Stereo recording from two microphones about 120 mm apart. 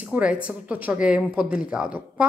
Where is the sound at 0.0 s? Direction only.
10° right (ahead or behind).